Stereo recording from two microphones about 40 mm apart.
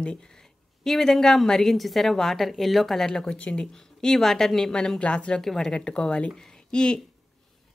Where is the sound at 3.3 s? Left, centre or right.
Left.